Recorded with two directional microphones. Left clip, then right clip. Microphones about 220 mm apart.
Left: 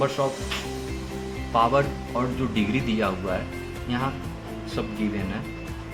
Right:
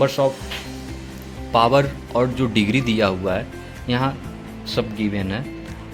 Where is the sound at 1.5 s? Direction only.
55° right (ahead or behind).